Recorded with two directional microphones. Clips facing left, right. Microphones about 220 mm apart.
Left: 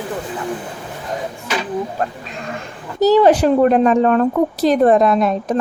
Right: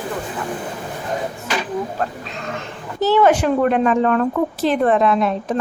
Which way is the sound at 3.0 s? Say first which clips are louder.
Left 4 dB; 35° left (ahead or behind).